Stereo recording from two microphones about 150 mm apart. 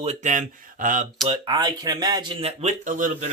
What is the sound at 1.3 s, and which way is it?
Speech, 35° right (ahead or behind).